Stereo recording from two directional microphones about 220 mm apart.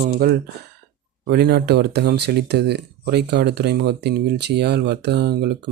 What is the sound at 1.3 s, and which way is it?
Speech, 45° right (ahead or behind).